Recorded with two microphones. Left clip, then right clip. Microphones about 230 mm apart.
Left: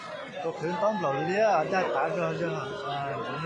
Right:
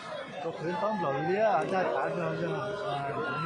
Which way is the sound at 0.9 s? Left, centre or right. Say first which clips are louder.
Left 2 dB; left.